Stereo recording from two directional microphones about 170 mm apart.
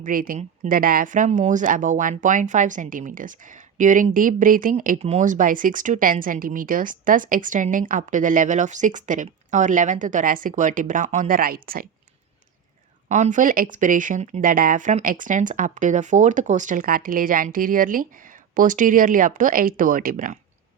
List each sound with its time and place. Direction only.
0.0 s speech: 55° right (ahead or behind)
13.1 s speech: 45° right (ahead or behind)